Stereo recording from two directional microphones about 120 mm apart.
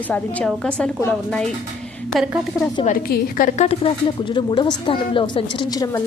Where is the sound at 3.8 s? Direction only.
40° left (ahead or behind).